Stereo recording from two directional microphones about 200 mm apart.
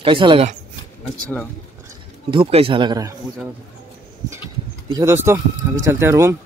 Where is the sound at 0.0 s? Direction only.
25° right (ahead or behind).